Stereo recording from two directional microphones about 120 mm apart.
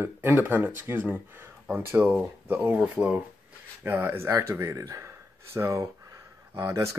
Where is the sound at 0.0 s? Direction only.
20° right (ahead or behind).